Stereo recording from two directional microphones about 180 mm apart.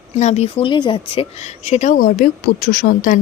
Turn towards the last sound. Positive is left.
turn(degrees=50)  # may be behind; listen again after turning